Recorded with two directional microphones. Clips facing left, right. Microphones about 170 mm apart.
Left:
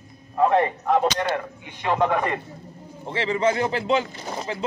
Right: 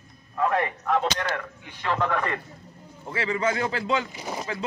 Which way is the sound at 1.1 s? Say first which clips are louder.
Left 5 dB; 20° left (ahead or behind).